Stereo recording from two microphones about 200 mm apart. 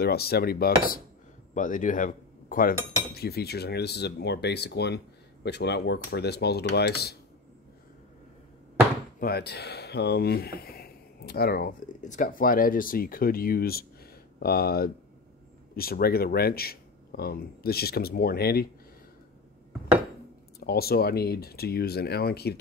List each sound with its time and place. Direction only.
0.0 s speech: 50° left (ahead or behind)
3.2 s speech: 50° left (ahead or behind)
9.2 s speech: 50° left (ahead or behind)
20.6 s speech: 50° left (ahead or behind)